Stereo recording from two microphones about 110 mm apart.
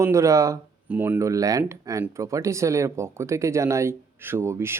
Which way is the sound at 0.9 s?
15° right (ahead or behind).